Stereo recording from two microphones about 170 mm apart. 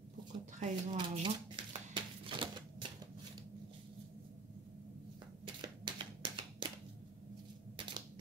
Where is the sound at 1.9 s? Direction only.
30° right (ahead or behind).